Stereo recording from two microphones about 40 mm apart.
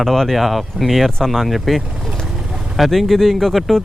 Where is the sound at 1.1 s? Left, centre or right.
Centre.